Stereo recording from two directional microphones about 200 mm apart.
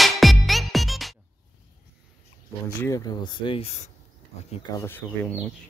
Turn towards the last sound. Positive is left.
turn(degrees=10)  # may be behind; listen again after turning